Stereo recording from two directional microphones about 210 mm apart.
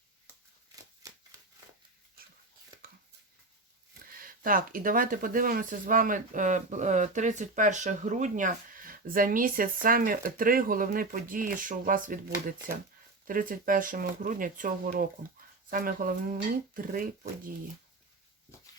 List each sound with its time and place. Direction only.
1.0 s shuffling cards: 15° right (ahead or behind)
4.1 s speech: 40° right (ahead or behind)